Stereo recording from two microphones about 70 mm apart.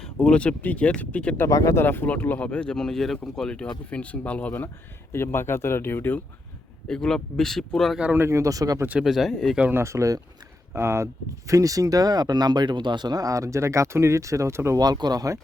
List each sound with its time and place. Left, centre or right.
0.0 s speech: centre
1.5 s speech: left
1.7 s speech: left
5.1 s speech: left
6.8 s speech: centre
8.0 s speech: right
8.3 s speech: right
9.0 s speech: centre
9.7 s speech: right
14.8 s speech: right